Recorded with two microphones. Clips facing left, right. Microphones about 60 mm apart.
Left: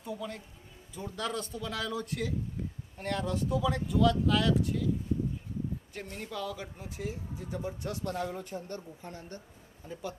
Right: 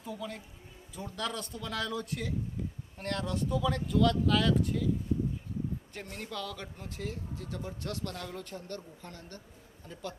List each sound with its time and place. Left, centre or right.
0.1 s speech: centre
5.9 s speech: centre